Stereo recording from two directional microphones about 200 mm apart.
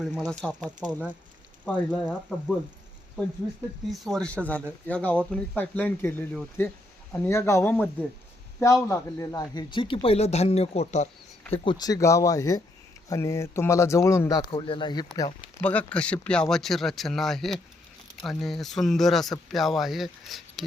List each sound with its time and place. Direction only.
0.0 s speech: centre (ahead or behind)
3.8 s speech: centre (ahead or behind); by 15.3 s 20° left (ahead or behind)
15.6 s speech: 5° left (ahead or behind)